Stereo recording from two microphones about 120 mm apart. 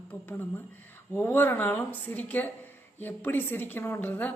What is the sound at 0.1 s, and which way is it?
Speech, 15° left (ahead or behind).